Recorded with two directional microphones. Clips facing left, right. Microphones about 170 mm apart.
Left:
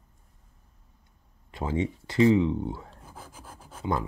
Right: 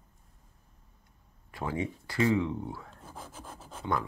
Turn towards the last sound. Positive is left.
turn(degrees=10)  # may be behind; listen again after turning